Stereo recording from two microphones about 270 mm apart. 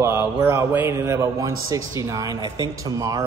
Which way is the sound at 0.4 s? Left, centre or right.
Centre.